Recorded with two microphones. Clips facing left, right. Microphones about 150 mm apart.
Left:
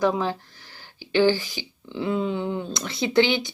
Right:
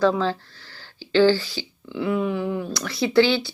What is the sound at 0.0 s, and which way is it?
Speech, 15° left (ahead or behind).